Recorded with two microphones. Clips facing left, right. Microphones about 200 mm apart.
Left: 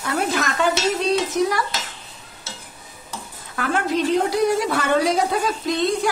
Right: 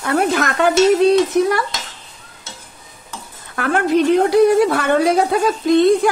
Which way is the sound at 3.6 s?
60° right (ahead or behind).